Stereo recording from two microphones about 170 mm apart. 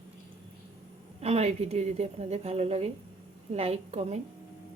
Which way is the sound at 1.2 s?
40° right (ahead or behind).